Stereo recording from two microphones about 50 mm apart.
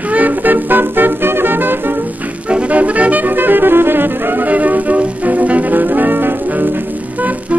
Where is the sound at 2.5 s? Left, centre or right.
Right.